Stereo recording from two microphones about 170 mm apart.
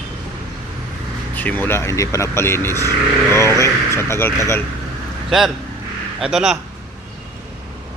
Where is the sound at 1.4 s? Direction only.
10° left (ahead or behind).